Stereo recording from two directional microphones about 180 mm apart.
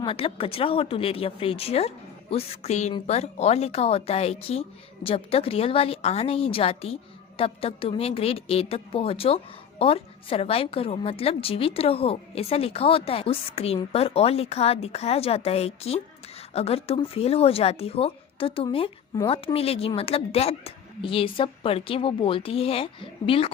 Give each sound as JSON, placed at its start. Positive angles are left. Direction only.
{"t": 0.0, "sound": "a woman's voice", "side_deg": 30}